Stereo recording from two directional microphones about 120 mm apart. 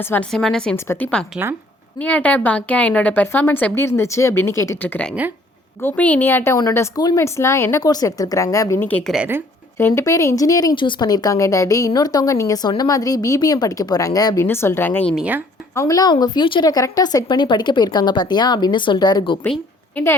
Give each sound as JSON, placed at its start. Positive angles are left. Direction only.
{"t": 0.0, "sound": "a woman's voice", "side_deg": 15}
{"t": 0.3, "sound": "a woman's voice", "side_deg": 5}
{"t": 6.7, "sound": "a woman's voice", "side_deg": 30}
{"t": 8.8, "sound": "a woman's voice", "side_deg": 15}
{"t": 14.4, "sound": "a woman's voice", "side_deg": 20}
{"t": 15.1, "sound": "speech", "side_deg": -10}
{"t": 15.7, "sound": "speech", "side_deg": 25}